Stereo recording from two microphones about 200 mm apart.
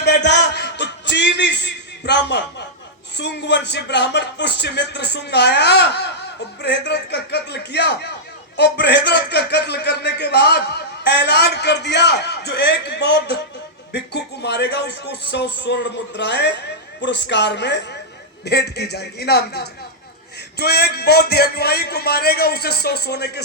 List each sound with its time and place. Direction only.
0.0 s music: 60° left (ahead or behind)
3.2 s a man's voice: 60° left (ahead or behind)